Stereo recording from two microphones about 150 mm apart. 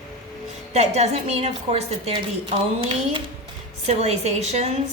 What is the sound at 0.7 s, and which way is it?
Speech, 45° right (ahead or behind).